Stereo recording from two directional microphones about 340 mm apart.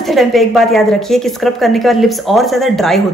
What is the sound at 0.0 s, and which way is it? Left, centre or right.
Speech, centre.